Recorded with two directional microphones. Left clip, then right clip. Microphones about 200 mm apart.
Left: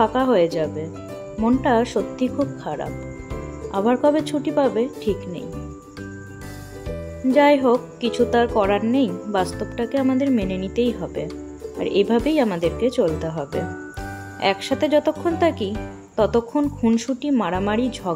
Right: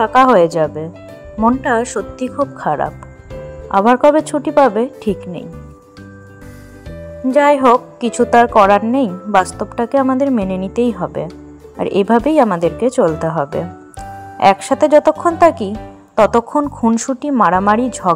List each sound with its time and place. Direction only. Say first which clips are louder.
0.0 s speech: right 8 dB; 20° right (ahead or behind)
7.2 s speech: right 6 dB; 30° right (ahead or behind)